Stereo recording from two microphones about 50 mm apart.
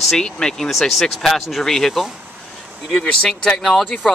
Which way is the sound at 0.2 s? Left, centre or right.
Centre.